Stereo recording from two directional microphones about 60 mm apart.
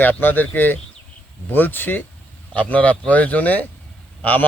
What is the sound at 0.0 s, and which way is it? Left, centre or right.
A man's voice, left.